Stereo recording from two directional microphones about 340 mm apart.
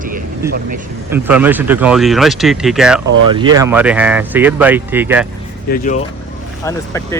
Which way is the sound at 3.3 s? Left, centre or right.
Centre.